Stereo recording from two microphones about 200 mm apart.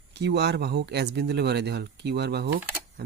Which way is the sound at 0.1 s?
55° right (ahead or behind).